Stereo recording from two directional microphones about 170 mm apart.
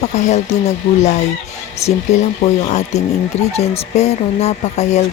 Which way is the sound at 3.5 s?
40° left (ahead or behind).